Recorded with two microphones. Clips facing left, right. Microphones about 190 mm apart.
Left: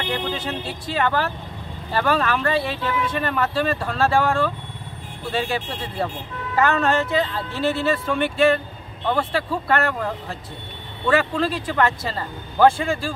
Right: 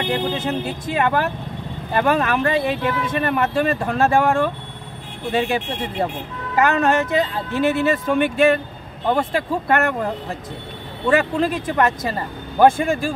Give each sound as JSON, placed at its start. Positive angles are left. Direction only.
{"t": 0.0, "sound": "speech", "side_deg": -20}
{"t": 11.1, "sound": "speech", "side_deg": -15}